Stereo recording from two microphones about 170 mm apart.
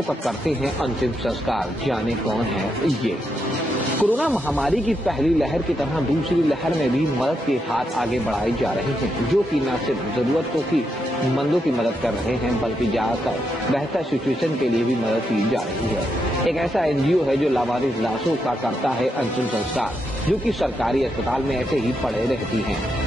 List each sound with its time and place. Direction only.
4.0 s speech: 10° right (ahead or behind)
4.6 s speech: 5° left (ahead or behind)
7.2 s speech: centre (ahead or behind)
16.4 s speech: centre (ahead or behind)
20.2 s speech: centre (ahead or behind)